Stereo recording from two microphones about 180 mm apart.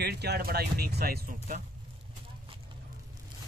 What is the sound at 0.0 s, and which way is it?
Speech, 65° right (ahead or behind).